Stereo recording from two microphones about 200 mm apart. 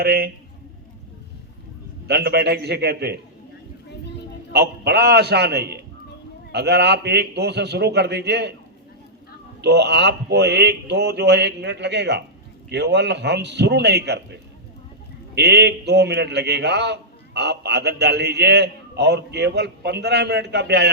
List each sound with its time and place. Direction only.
0.0 s a man's voice: 50° right (ahead or behind)
2.0 s a man's voice: 55° right (ahead or behind)
4.5 s a man's voice: 55° right (ahead or behind)
9.6 s a man's voice: 60° right (ahead or behind)
15.4 s a man's voice: 55° right (ahead or behind)